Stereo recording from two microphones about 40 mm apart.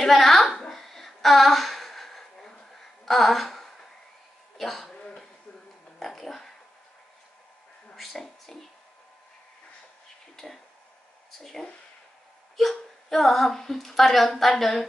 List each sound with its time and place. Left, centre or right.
0.0 s child singing: centre
4.6 s speech: centre
4.9 s a sound: centre
5.9 s dog: centre
7.9 s speech: centre
10.3 s a sound: centre
11.3 s speech: centre